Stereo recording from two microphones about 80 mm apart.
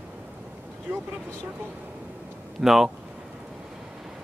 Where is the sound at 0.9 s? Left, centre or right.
Right.